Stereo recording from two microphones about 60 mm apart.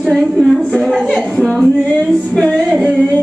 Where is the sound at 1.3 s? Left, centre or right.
Centre.